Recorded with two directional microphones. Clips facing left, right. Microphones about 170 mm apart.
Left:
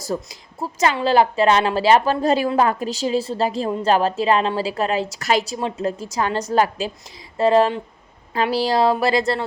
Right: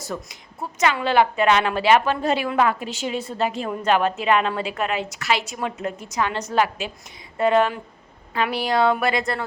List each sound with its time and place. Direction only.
0.1 s a woman's voice: 35° left (ahead or behind)